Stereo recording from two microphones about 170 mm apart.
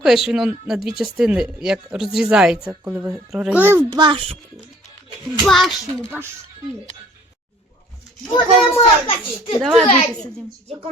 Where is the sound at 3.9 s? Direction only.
30° right (ahead or behind).